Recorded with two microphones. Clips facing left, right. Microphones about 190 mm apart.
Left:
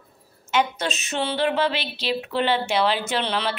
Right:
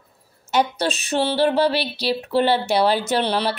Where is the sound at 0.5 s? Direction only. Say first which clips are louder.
Right 3 dB; 35° right (ahead or behind).